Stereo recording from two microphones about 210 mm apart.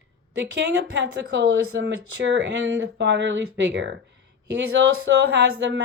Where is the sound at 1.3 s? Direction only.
55° right (ahead or behind).